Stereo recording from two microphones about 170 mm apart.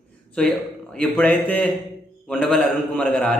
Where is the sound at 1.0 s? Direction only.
10° left (ahead or behind).